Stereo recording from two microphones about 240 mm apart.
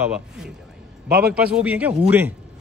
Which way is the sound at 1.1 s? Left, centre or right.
Right.